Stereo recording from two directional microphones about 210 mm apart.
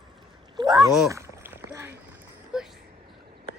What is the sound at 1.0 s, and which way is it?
Rowboat, 15° right (ahead or behind).